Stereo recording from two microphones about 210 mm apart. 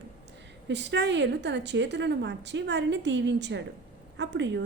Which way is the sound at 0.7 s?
55° right (ahead or behind).